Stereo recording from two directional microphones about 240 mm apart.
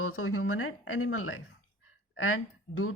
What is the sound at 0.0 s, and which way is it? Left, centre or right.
A woman's voice, left.